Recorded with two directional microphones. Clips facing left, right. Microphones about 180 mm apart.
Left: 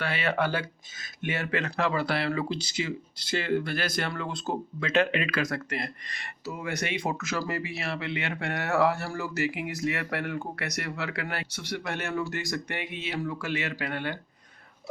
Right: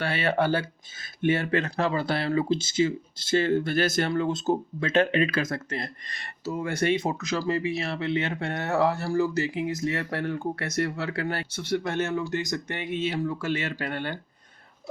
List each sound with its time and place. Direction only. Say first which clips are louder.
0.0 s speech: right 3 dB; 30° right (ahead or behind)
4.1 s speech: right 8 dB; 40° right (ahead or behind)